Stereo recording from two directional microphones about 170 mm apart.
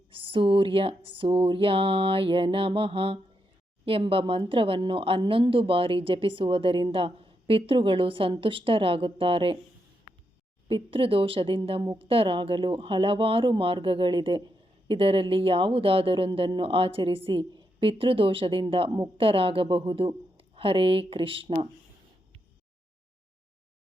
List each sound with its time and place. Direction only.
0.1 s speech: 30° right (ahead or behind)
10.7 s speech: 30° right (ahead or behind)